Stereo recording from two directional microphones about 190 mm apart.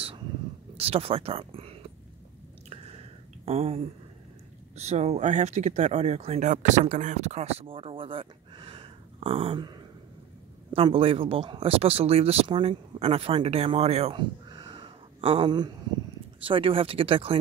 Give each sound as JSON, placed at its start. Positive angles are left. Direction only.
{"t": 0.7, "sound": "speech", "side_deg": -30}
{"t": 3.4, "sound": "speech", "side_deg": -30}